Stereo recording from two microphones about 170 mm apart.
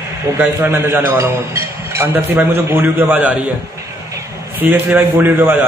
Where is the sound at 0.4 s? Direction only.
10° right (ahead or behind).